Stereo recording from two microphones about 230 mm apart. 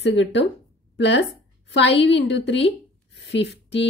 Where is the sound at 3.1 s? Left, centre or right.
Left.